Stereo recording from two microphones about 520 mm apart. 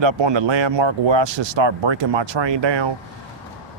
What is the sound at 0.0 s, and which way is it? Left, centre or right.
Speech, right.